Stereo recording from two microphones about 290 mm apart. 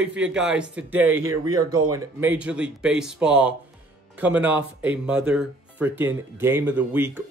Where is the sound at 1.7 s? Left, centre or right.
Right.